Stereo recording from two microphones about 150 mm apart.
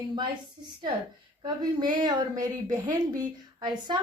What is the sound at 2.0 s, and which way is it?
A woman's voice, 25° right (ahead or behind).